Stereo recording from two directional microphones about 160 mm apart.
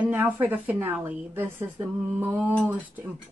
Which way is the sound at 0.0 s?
10° right (ahead or behind).